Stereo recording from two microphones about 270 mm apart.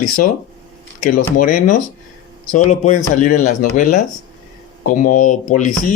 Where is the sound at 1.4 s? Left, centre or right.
Left.